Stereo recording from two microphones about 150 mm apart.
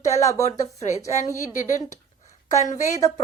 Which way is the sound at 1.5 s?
60° left (ahead or behind).